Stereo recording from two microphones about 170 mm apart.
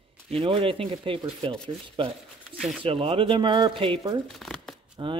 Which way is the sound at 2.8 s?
30° right (ahead or behind).